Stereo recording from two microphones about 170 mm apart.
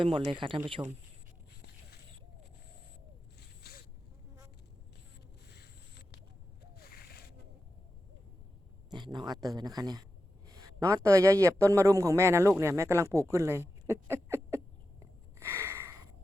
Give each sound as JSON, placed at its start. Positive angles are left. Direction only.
{"t": 0.3, "sound": "speech", "side_deg": -30}
{"t": 3.6, "sound": "zipper", "side_deg": 65}
{"t": 6.7, "sound": "a sound", "side_deg": 65}
{"t": 8.9, "sound": "a man's voice", "side_deg": -25}
{"t": 15.4, "sound": "sniff", "side_deg": -15}